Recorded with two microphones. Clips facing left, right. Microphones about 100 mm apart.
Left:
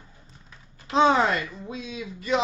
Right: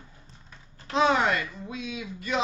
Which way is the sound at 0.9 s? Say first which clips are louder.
Left 3 dB; 30° left (ahead or behind).